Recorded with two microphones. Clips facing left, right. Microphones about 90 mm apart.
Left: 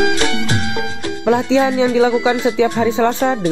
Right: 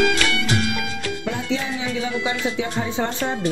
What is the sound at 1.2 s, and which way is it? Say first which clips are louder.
Speech: left 14 dB; 90° left.